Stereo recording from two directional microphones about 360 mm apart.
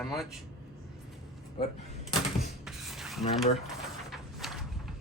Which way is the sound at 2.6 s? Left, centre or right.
Centre.